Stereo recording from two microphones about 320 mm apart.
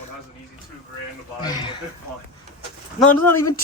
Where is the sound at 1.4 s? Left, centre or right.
Centre.